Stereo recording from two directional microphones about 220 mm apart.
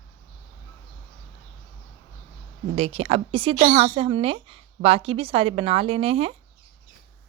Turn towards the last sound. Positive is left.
turn(degrees=-25)  # may be behind; listen again after turning